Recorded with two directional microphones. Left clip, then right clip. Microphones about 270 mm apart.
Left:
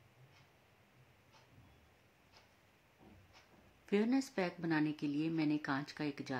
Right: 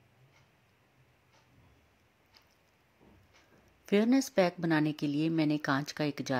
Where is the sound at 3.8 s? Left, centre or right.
Right.